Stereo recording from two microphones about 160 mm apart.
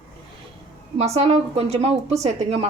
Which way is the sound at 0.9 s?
40° right (ahead or behind).